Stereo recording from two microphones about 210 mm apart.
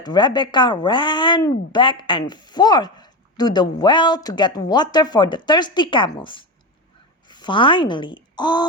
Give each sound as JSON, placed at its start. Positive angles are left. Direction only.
{"t": 0.0, "sound": "a woman's voice", "side_deg": 20}